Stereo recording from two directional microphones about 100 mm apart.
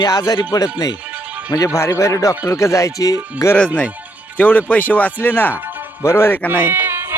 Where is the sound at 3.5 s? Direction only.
15° left (ahead or behind).